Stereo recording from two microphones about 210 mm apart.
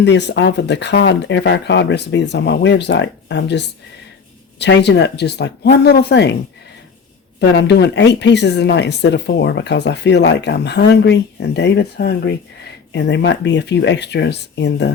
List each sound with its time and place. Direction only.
0.0 s speech: 55° left (ahead or behind)
7.3 s speech: 55° left (ahead or behind)